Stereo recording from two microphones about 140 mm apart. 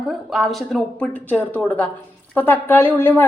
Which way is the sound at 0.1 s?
Centre (ahead or behind).